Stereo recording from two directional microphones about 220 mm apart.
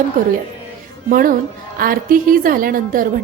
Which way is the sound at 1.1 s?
40° right (ahead or behind).